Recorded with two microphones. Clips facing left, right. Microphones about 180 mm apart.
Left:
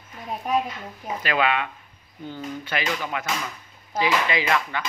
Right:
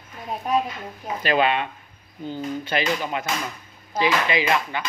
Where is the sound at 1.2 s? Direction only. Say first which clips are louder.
Right 3 dB; 30° right (ahead or behind).